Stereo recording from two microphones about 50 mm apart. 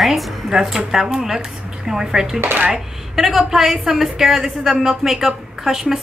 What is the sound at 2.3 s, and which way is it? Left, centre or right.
Speech, right.